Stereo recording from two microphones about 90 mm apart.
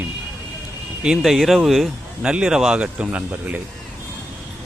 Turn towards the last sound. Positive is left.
turn(degrees=-20)  # may be behind; listen again after turning